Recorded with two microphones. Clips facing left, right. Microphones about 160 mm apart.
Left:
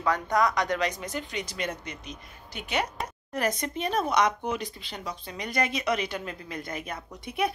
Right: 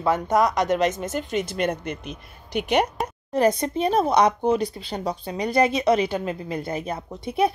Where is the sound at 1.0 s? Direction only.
50° right (ahead or behind).